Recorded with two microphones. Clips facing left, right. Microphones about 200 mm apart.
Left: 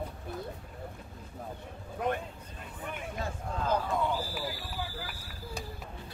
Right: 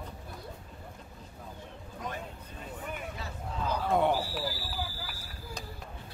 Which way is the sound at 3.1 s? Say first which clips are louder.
Left 3 dB; 50° left (ahead or behind).